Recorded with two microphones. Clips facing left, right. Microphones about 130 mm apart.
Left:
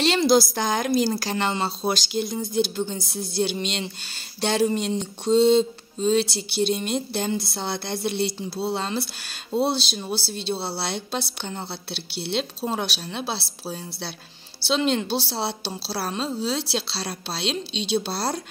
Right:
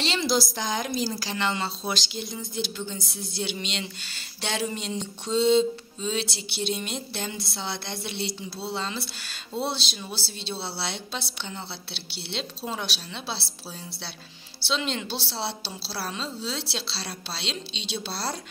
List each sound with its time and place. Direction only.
0.0 s speech: 50° left (ahead or behind)
14.7 s speech: 45° left (ahead or behind)